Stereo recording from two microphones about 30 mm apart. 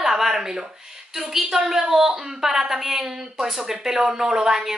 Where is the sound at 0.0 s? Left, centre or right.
Centre.